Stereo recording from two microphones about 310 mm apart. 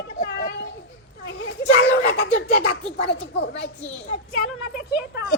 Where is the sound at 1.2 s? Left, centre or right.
Left.